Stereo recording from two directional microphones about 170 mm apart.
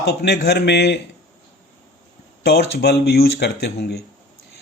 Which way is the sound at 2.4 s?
70° left (ahead or behind).